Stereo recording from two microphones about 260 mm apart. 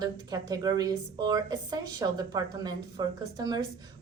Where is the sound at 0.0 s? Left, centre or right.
Centre.